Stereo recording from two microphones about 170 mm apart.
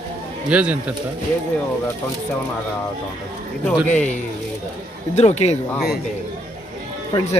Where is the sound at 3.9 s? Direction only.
45° left (ahead or behind).